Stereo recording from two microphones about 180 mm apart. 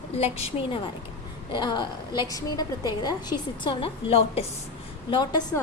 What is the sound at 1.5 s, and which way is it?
A woman's voice, 25° left (ahead or behind).